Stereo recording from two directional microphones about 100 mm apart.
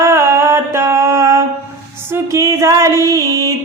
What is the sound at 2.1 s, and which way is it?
Music, 30° right (ahead or behind).